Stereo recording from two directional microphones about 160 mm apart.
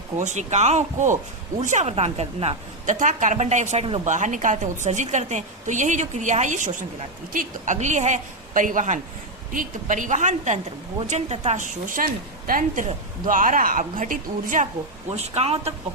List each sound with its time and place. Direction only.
0.2 s a woman's voice: 50° right (ahead or behind)
4.0 s a woman's voice: 50° right (ahead or behind)
15.1 s a woman's voice: 40° right (ahead or behind)